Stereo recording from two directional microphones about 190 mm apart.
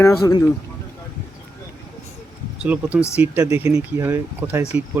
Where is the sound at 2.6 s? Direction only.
5° right (ahead or behind).